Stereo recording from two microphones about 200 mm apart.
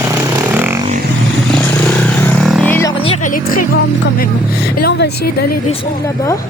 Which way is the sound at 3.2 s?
45° left (ahead or behind).